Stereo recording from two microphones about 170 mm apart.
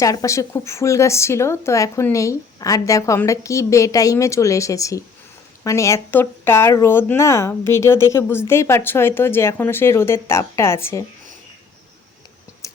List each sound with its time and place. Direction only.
0.0 s speech: 20° left (ahead or behind)